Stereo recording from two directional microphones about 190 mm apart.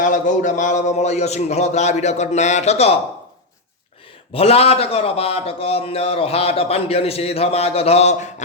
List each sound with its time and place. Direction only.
0.0 s a man's voice: 40° left (ahead or behind)
4.3 s a man's voice: 30° left (ahead or behind)